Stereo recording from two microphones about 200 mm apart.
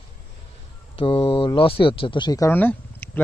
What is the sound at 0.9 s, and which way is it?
Speech, 25° left (ahead or behind).